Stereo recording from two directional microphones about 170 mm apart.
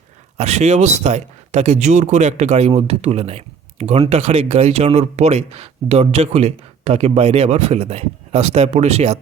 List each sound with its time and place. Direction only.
0.3 s speech: 40° right (ahead or behind)